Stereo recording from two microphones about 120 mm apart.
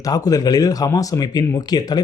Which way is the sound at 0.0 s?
30° left (ahead or behind).